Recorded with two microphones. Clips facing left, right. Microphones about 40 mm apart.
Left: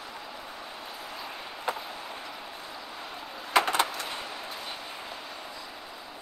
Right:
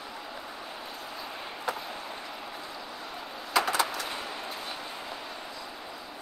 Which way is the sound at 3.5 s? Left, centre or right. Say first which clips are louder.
Left 2 dB; left.